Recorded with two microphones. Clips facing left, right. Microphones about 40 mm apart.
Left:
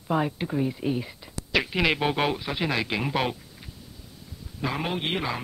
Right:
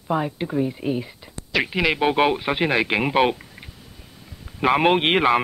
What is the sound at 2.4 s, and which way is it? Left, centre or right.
Speech, right.